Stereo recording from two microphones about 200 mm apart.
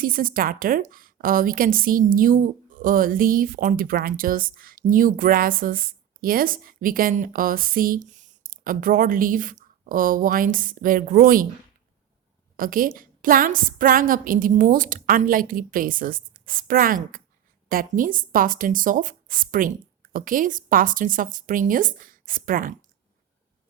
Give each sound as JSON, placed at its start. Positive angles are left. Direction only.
{"t": 0.0, "sound": "a woman's voice", "side_deg": -45}
{"t": 12.5, "sound": "a woman's voice", "side_deg": -45}